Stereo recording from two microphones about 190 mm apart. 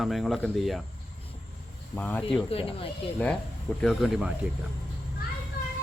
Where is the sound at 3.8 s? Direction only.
Centre (ahead or behind).